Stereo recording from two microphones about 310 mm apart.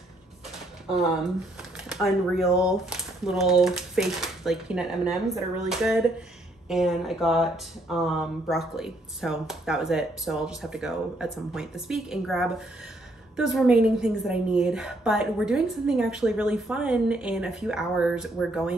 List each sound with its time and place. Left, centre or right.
0.8 s speech: centre